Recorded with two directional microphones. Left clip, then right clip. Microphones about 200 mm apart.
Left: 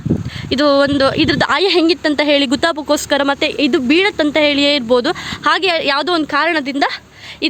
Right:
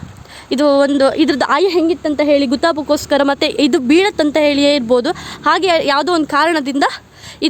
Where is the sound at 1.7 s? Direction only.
5° left (ahead or behind).